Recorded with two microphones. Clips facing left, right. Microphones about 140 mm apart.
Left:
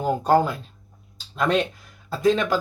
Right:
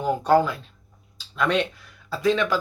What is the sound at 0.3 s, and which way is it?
Speech, 45° left (ahead or behind).